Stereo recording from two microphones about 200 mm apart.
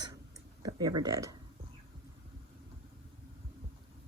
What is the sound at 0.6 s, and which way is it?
Speech, 20° right (ahead or behind).